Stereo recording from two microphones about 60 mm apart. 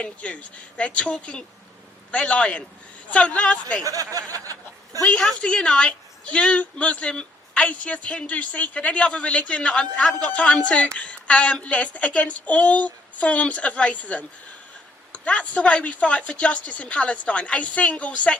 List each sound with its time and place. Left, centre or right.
0.0 s a woman's voice: left
3.8 s speech: right
5.4 s a woman's voice: centre